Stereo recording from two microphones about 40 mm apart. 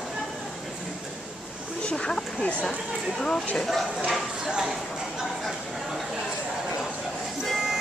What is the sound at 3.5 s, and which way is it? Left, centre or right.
Clip-clop, centre.